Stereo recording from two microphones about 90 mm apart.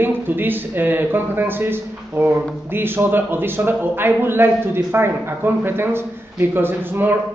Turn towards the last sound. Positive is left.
turn(degrees=-25)  # may be behind; listen again after turning